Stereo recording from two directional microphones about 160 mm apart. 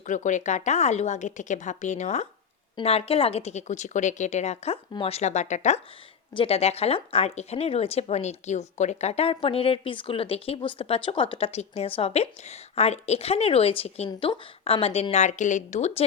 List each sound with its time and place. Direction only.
0.0 s speech: 50° left (ahead or behind)